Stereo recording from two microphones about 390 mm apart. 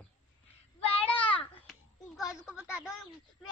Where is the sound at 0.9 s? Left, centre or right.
Centre.